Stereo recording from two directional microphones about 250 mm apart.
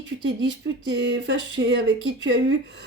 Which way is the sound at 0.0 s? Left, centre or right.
Right.